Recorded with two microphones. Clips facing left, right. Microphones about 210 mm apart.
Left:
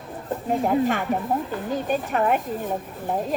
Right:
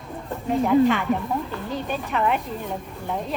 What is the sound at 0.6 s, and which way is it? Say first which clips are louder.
Speech: right 5 dB; 45° left (ahead or behind).